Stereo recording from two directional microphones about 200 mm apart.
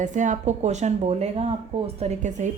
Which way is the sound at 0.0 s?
40° right (ahead or behind).